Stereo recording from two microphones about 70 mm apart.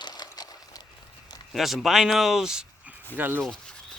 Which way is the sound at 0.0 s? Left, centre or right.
Left.